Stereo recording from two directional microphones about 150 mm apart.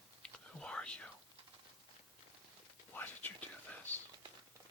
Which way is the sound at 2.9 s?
10° left (ahead or behind).